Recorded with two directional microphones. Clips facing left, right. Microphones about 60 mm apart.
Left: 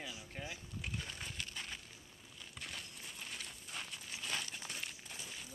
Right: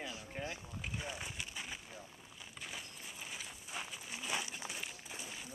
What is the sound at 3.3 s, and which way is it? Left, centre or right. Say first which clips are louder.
Crumpling: right 3 dB; centre.